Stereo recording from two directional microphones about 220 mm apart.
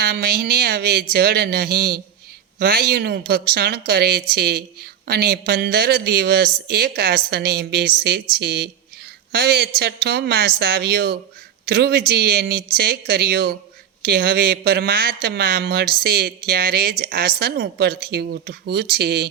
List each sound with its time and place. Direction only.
0.0 s a man's voice: 45° right (ahead or behind)